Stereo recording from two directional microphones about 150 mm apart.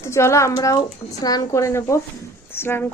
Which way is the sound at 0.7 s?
25° left (ahead or behind).